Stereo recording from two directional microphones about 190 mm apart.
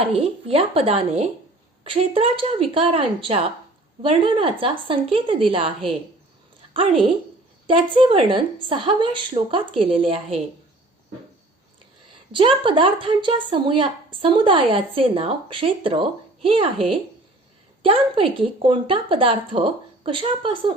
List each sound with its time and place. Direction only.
0.0 s a woman's voice: 30° right (ahead or behind)
7.7 s a woman's voice: 25° right (ahead or behind)
12.3 s a woman's voice: 25° right (ahead or behind)
17.8 s a woman's voice: 30° right (ahead or behind)